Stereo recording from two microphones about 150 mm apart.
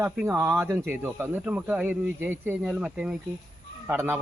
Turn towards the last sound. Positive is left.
turn(degrees=-15)  # may be behind; listen again after turning